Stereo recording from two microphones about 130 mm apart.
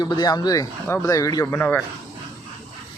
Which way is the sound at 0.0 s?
30° left (ahead or behind).